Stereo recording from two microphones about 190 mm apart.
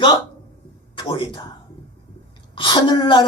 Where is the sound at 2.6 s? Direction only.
25° left (ahead or behind).